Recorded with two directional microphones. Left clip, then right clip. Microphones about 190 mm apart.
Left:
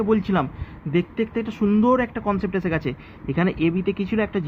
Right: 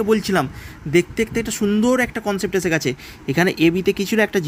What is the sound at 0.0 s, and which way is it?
Speech, 35° right (ahead or behind).